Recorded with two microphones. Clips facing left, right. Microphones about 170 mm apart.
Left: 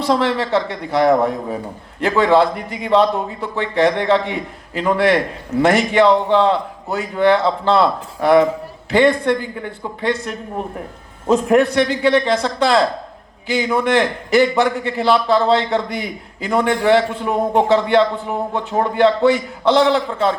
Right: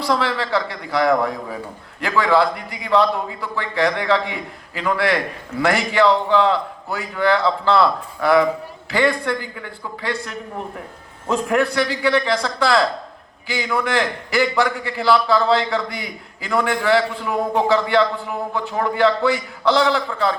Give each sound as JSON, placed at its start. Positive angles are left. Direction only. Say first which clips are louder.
{"t": 0.1, "sound": "a man's voice", "louder": "left 4 dB", "side_deg": 20}